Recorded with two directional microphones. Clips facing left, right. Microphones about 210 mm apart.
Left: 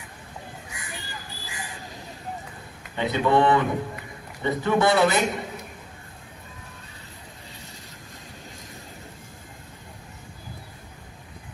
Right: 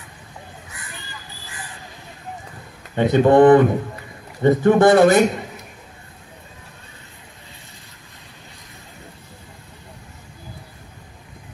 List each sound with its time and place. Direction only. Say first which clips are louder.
3.0 s speech: right 9 dB; 50° right (ahead or behind)